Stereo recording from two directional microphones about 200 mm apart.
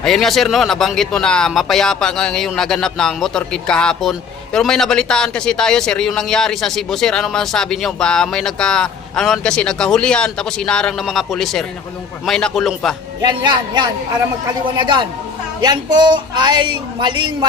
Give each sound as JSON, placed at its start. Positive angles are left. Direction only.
{"t": 0.0, "sound": "a man's voice", "side_deg": 0}
{"t": 13.2, "sound": "speech", "side_deg": -20}
{"t": 15.6, "sound": "speech", "side_deg": -20}